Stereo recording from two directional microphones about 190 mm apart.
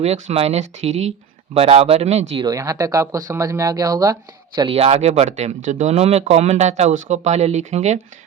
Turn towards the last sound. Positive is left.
turn(degrees=-35)  # may be behind; listen again after turning